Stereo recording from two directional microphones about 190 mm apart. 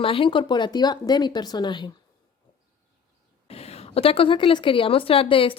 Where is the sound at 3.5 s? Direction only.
35° left (ahead or behind).